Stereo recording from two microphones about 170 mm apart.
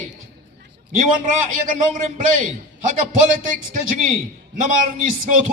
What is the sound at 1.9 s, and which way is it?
A man's voice, 50° right (ahead or behind).